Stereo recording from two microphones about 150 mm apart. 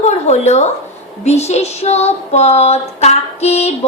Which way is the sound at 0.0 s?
50° left (ahead or behind).